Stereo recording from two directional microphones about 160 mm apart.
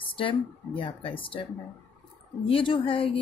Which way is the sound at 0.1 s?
35° left (ahead or behind).